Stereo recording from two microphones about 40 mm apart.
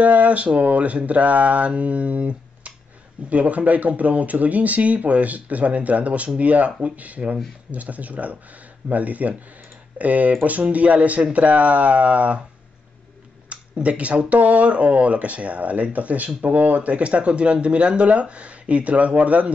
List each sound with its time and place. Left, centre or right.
0.0 s speech: right
13.5 s speech: right